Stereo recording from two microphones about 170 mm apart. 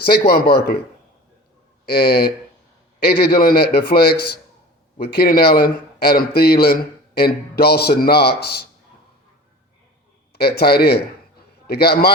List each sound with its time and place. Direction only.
0.0 s a man's voice: 65° left (ahead or behind)
1.9 s a man's voice: 65° left (ahead or behind)
10.3 s a man's voice: 65° left (ahead or behind)